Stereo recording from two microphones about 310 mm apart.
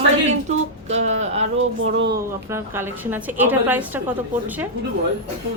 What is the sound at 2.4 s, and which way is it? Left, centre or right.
A woman's voice, centre.